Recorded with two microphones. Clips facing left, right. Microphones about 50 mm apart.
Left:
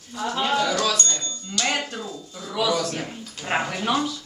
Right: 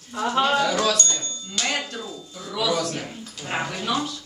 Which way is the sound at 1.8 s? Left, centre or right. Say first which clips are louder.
Left 1 dB; centre.